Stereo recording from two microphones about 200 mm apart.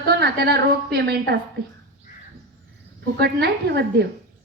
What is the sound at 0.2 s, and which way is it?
A woman's voice, 55° right (ahead or behind).